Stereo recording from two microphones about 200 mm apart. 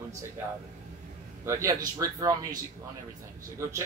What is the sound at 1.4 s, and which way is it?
A man's voice, 15° right (ahead or behind).